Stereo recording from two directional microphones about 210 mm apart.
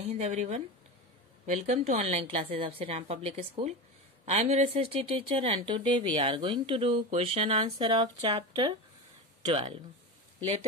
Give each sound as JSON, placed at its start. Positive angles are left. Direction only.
{"t": 0.1, "sound": "speech", "side_deg": -35}